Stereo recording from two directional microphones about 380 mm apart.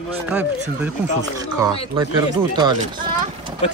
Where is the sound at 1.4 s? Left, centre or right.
Centre.